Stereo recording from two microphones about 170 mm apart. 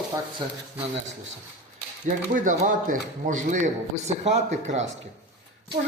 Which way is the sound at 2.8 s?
50° right (ahead or behind).